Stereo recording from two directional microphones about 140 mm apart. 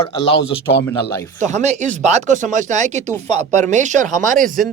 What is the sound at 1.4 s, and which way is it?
Speech, 55° right (ahead or behind).